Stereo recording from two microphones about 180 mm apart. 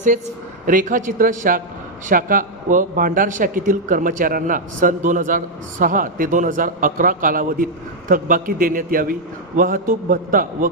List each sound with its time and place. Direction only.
0.7 s a man's voice: 45° right (ahead or behind)